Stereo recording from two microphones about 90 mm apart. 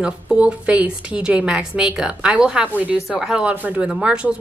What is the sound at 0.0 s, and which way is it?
Speech, 15° right (ahead or behind).